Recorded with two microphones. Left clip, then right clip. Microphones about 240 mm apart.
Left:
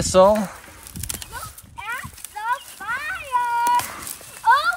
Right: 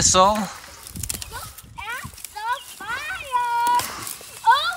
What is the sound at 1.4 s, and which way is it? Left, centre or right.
Clip-clop, right.